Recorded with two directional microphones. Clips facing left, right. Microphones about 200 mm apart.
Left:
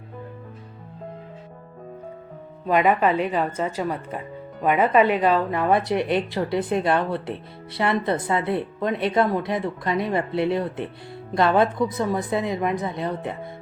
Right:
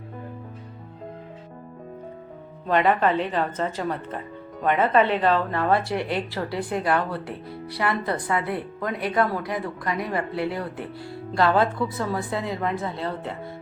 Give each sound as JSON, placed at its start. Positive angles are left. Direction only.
{"t": 2.6, "sound": "a woman's voice", "side_deg": 10}